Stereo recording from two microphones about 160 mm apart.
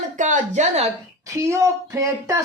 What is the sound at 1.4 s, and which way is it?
Speech, 15° right (ahead or behind).